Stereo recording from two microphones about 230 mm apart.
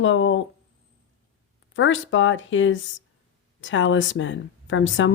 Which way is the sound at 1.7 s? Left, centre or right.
Left.